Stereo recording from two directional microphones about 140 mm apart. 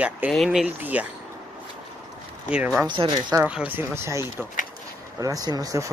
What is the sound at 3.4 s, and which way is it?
Speech, 10° right (ahead or behind).